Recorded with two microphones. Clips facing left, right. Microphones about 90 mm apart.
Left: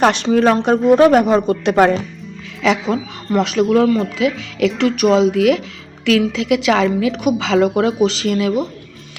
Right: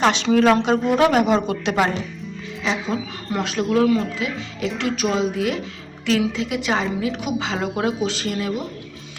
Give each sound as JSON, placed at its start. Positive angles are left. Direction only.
{"t": 0.0, "sound": "a woman's voice", "side_deg": 50}
{"t": 0.3, "sound": "speech", "side_deg": 35}
{"t": 2.6, "sound": "speech", "side_deg": 80}
{"t": 4.2, "sound": "a woman's voice", "side_deg": 90}
{"t": 4.8, "sound": "speech", "side_deg": 70}
{"t": 6.1, "sound": "a woman's voice", "side_deg": 80}